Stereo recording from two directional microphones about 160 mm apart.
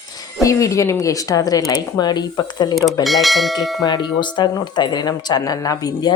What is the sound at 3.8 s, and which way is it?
Speech, 25° left (ahead or behind).